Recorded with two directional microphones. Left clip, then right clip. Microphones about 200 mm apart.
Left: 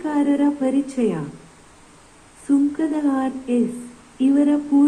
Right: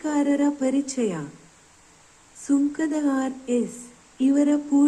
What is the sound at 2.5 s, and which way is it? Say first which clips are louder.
Speech: left 3 dB; 25° right (ahead or behind).